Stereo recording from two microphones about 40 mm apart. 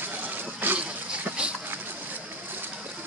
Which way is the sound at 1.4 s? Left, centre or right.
Right.